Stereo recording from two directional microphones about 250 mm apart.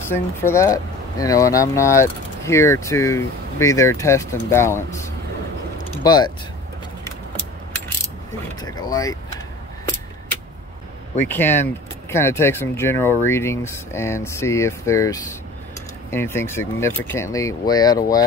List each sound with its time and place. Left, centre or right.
0.0 s speech: centre
8.5 s speech: centre
11.2 s speech: centre